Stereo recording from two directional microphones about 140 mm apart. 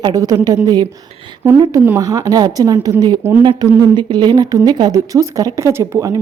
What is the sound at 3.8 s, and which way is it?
A woman's voice, 30° right (ahead or behind).